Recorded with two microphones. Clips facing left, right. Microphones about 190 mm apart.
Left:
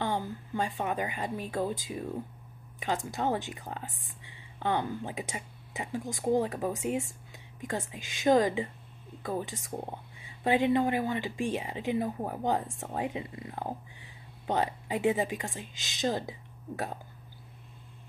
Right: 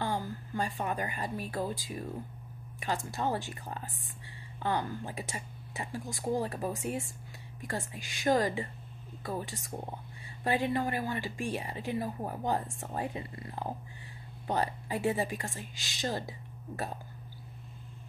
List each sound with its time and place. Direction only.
0.0 s a woman's voice: 20° left (ahead or behind)
3.1 s speech: 20° left (ahead or behind)